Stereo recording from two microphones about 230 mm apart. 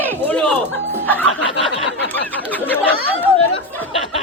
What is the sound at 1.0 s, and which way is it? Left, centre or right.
Snicker, centre.